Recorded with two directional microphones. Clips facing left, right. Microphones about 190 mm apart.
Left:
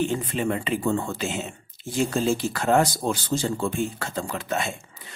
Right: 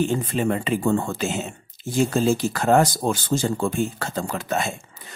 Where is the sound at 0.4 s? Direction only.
40° right (ahead or behind).